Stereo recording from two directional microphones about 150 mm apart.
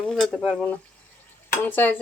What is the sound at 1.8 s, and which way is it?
Speech, 10° left (ahead or behind).